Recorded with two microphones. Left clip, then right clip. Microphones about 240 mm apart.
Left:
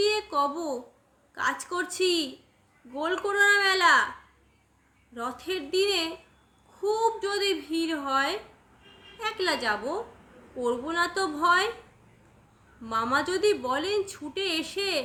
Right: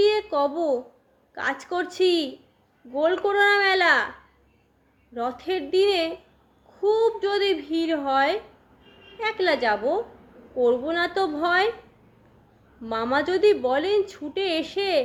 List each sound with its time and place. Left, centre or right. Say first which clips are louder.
0.0 s a sound: right 4 dB; centre
1.4 s a woman's voice: right 2 dB; centre
5.1 s a woman's voice: right 5 dB; centre
12.8 s a woman's voice: right 2 dB; centre